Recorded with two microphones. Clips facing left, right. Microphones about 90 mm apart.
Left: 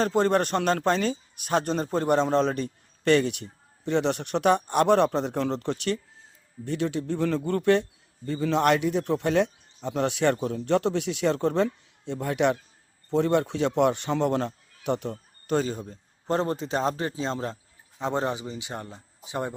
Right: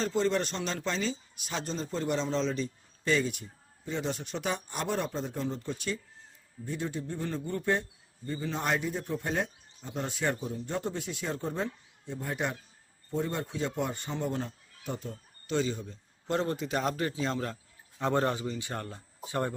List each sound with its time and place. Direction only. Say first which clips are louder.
0.0 s speech: left 6 dB; 55° left (ahead or behind); by 6.0 s 75° left (ahead or behind)
6.7 s speech: left 7 dB; 90° left; by 15.2 s 70° left (ahead or behind)
15.4 s speech: left 4 dB; 45° left (ahead or behind); by 19.5 s 15° left (ahead or behind)